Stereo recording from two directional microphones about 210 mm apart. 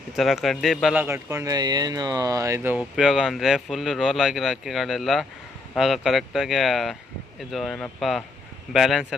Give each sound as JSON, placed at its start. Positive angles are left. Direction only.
{"t": 0.2, "sound": "speech", "side_deg": 0}
{"t": 1.0, "sound": "speech", "side_deg": -10}